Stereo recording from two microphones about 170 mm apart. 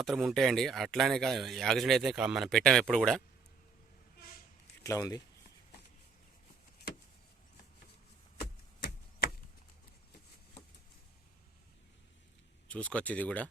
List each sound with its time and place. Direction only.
0.0 s speech: centre (ahead or behind)
4.8 s speech: 20° left (ahead or behind)
12.6 s speech: 5° left (ahead or behind)